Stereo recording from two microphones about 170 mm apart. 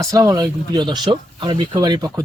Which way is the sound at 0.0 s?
20° right (ahead or behind).